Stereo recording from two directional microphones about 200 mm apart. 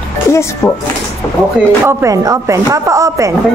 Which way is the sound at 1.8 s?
15° right (ahead or behind).